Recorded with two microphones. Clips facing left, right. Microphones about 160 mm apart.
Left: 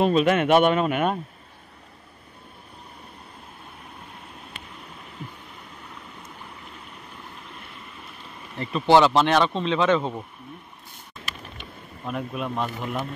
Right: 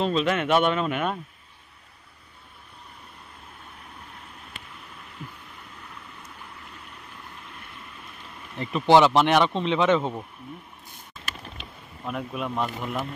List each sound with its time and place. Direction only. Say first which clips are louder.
0.0 s speech: left 4 dB; 50° left (ahead or behind)
8.5 s speech: even; 15° right (ahead or behind)
12.1 s speech: left 1 dB; centre (ahead or behind)